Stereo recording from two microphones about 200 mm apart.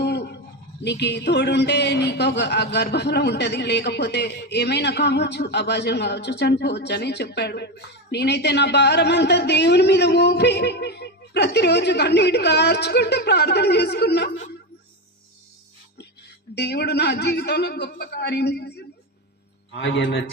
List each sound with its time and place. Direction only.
0.0 s a sound: 55° left (ahead or behind)
0.8 s speech: 60° left (ahead or behind)
16.6 s a man's voice: 55° left (ahead or behind)